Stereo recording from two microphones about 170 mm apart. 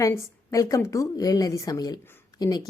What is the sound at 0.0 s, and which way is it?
Speech, 20° left (ahead or behind).